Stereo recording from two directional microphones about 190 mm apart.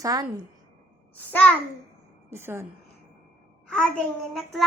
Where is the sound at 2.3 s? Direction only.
15° right (ahead or behind).